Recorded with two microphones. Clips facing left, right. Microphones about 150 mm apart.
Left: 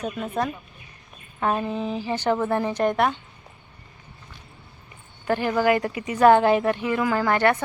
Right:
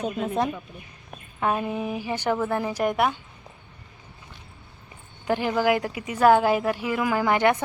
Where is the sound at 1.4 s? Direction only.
10° right (ahead or behind).